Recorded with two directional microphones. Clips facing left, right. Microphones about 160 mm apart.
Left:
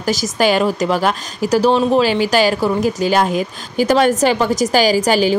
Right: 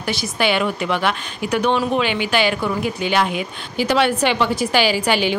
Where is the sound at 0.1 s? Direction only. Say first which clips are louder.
Left 5 dB; 40° left (ahead or behind).